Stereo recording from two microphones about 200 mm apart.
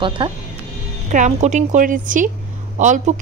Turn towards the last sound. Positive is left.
turn(degrees=-35)  # may be behind; listen again after turning